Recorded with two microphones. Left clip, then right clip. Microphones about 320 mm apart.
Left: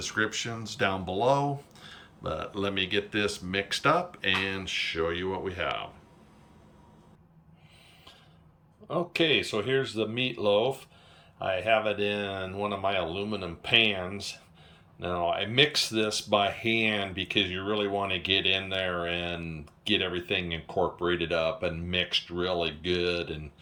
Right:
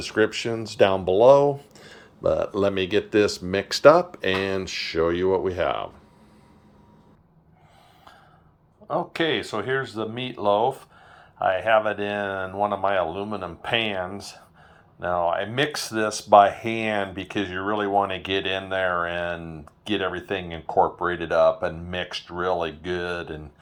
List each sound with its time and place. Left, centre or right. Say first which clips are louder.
0.0 s speech: right 7 dB; centre
8.9 s speech: right 2 dB; centre